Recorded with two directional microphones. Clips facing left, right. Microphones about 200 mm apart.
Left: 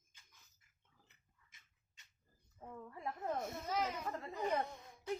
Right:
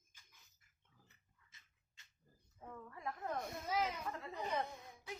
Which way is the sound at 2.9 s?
25° left (ahead or behind).